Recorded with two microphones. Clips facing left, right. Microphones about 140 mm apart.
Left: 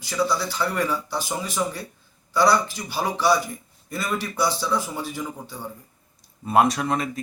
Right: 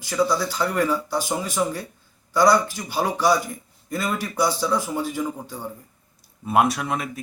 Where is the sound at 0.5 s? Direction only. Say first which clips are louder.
Right 2 dB; 15° right (ahead or behind).